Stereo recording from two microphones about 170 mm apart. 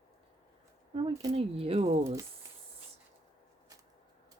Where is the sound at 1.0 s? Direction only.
35° right (ahead or behind).